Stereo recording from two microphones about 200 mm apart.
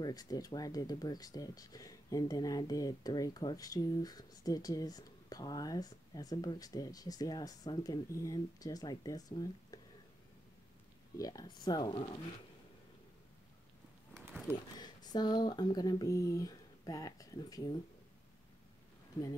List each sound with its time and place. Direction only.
0.0 s speech: 20° left (ahead or behind)
11.1 s speech: 20° left (ahead or behind)
14.1 s a sound: 10° right (ahead or behind)
14.5 s speech: 20° left (ahead or behind)